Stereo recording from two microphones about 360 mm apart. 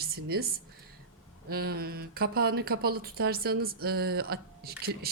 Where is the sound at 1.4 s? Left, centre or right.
Right.